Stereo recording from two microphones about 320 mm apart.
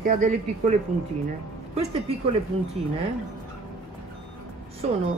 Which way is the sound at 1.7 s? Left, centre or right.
Centre.